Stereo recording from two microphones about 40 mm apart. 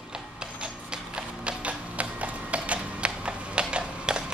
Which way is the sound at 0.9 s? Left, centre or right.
Right.